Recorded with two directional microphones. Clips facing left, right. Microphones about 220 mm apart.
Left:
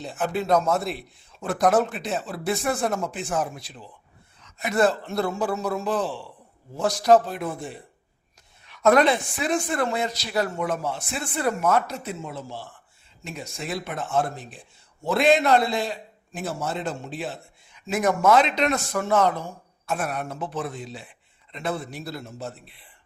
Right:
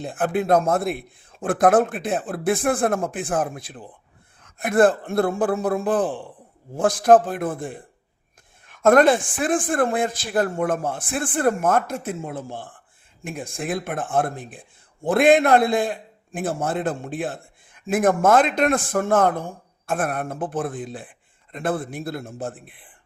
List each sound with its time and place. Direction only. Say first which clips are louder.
0.0 s a man's voice: right 4 dB; 50° right (ahead or behind)